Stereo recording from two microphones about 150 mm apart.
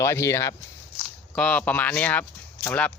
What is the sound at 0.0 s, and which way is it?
Speech, 20° left (ahead or behind).